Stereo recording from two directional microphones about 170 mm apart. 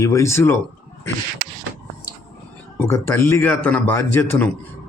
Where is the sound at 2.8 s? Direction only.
15° left (ahead or behind).